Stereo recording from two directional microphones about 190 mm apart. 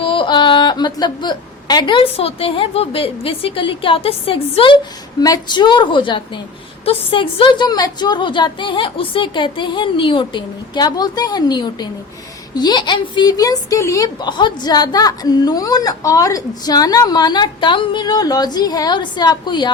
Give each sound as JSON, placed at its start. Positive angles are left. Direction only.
{"t": 0.0, "sound": "a woman's voice", "side_deg": 25}